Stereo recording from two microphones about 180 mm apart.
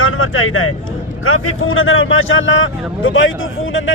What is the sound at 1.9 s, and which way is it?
A man's voice, 90° left.